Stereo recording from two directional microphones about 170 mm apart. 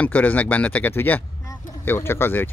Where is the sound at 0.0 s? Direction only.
10° left (ahead or behind).